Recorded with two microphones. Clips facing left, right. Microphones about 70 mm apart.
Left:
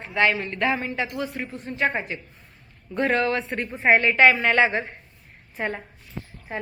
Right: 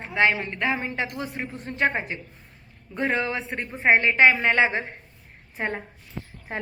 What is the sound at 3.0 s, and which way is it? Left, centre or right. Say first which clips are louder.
A woman's voice: left 3 dB; centre.